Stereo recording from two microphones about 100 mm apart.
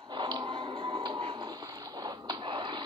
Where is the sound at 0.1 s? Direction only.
50° right (ahead or behind).